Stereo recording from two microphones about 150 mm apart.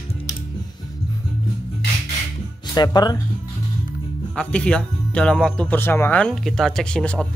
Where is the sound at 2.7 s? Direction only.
25° left (ahead or behind).